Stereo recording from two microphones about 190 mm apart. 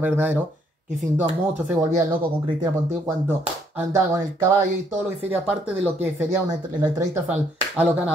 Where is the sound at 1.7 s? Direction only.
15° right (ahead or behind).